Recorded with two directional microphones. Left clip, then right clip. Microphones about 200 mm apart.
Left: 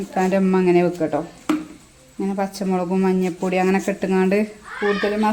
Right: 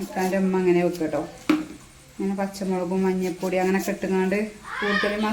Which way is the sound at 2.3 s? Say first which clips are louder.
Left 5 dB; 50° left (ahead or behind).